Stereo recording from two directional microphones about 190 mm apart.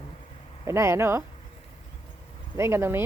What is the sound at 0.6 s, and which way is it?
Speech, 15° right (ahead or behind).